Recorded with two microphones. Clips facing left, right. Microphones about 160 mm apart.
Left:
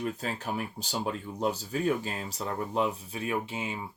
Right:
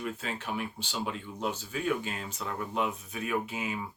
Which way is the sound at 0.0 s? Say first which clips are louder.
Left 3 dB; 35° left (ahead or behind).